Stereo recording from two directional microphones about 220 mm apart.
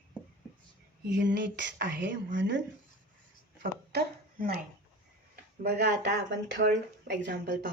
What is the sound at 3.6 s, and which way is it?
Speech, 40° right (ahead or behind).